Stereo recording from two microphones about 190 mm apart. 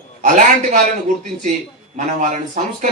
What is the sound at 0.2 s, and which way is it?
Speech, 40° right (ahead or behind).